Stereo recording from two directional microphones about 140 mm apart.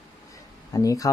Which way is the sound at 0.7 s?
25° left (ahead or behind).